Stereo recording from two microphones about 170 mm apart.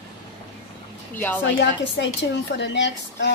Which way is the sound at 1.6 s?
90° left.